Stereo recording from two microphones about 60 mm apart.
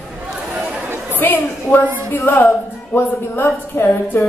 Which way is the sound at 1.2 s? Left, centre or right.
Left.